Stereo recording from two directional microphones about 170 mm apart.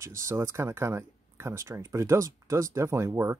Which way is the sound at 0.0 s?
15° right (ahead or behind).